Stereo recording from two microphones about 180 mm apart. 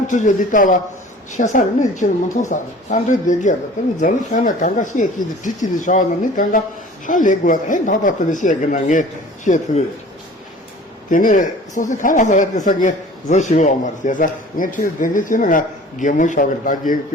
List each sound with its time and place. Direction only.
0.1 s speech: 45° left (ahead or behind)
11.1 s speech: 45° left (ahead or behind)